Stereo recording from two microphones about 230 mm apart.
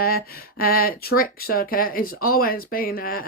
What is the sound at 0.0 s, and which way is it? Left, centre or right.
Speech, left.